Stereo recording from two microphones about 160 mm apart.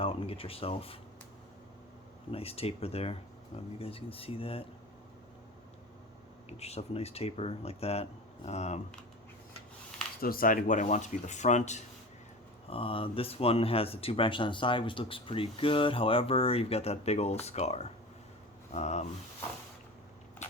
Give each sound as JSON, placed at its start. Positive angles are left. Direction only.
{"t": 0.0, "sound": "speech", "side_deg": 35}
{"t": 2.3, "sound": "speech", "side_deg": 40}
{"t": 6.5, "sound": "speech", "side_deg": 40}
{"t": 10.2, "sound": "speech", "side_deg": 65}
{"t": 12.6, "sound": "speech", "side_deg": 35}
{"t": 20.4, "sound": "crushing", "side_deg": 45}